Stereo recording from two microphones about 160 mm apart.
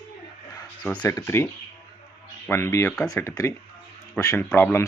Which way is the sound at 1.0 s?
15° left (ahead or behind).